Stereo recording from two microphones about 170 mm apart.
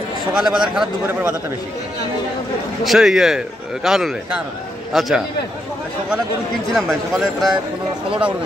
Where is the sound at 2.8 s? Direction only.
Centre (ahead or behind).